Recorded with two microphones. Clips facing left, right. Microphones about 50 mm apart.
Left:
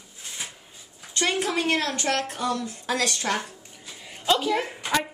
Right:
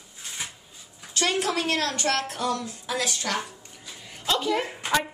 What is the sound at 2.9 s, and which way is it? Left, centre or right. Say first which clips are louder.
Speech: left 3 dB; left.